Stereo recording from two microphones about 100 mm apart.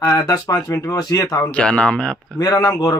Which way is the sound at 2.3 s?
40° left (ahead or behind).